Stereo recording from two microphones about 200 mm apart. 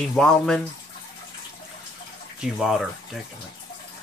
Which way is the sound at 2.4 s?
Centre (ahead or behind).